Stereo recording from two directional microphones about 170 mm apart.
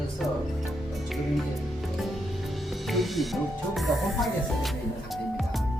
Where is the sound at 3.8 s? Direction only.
Centre (ahead or behind).